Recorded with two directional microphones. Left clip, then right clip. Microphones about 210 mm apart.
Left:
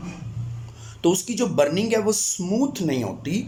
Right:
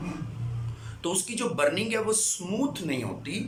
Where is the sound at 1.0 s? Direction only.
30° left (ahead or behind).